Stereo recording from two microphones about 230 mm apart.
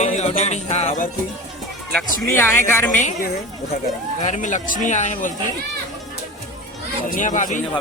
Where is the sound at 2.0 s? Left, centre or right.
Centre.